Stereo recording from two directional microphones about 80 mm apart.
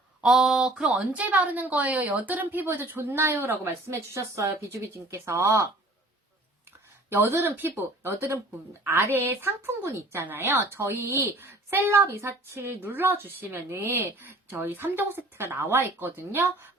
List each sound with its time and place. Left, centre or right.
0.2 s speech: centre; by 5.6 s right
7.1 s speech: right